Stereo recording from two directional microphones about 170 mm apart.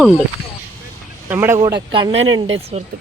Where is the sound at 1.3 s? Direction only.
10° right (ahead or behind).